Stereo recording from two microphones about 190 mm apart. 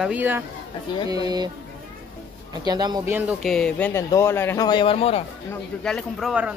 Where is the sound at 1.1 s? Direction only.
20° right (ahead or behind).